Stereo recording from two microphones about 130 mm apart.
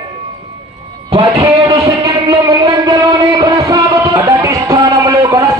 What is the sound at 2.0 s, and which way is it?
Music, 25° right (ahead or behind).